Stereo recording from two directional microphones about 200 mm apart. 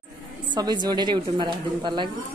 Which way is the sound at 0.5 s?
20° right (ahead or behind).